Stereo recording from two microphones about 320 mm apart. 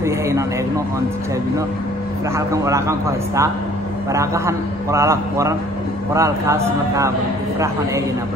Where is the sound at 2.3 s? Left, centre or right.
Centre.